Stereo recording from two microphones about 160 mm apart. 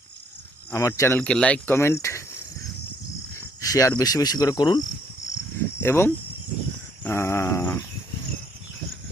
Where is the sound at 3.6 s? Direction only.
20° left (ahead or behind).